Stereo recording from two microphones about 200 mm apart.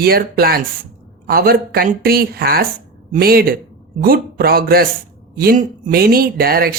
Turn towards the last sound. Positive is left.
turn(degrees=-50)  # may be behind; listen again after turning